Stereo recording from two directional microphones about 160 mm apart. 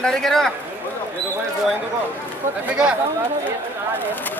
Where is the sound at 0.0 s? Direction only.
5° left (ahead or behind).